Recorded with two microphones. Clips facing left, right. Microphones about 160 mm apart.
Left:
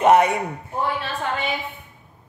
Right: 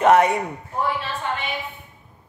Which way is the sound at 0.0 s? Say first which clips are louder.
Even; 20° left (ahead or behind).